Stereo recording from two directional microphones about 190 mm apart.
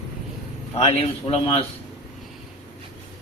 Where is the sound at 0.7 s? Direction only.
30° left (ahead or behind).